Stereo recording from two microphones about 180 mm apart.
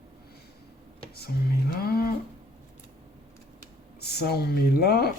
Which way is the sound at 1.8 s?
60° left (ahead or behind).